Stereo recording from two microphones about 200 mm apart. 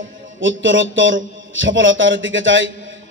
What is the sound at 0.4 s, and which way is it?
A man's voice, 70° right (ahead or behind).